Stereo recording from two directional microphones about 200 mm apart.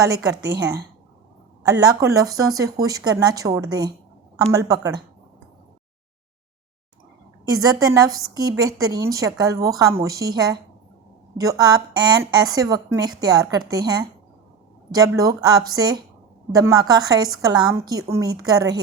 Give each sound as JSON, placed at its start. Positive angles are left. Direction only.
{"t": 0.0, "sound": "a woman's voice", "side_deg": -15}
{"t": 1.8, "sound": "a woman's voice", "side_deg": -15}
{"t": 7.4, "sound": "a woman's voice", "side_deg": -20}